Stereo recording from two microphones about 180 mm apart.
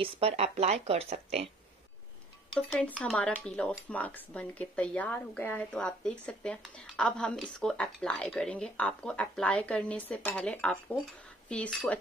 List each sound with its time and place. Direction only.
0.0 s speech: 35° right (ahead or behind)
2.7 s speech: 5° left (ahead or behind)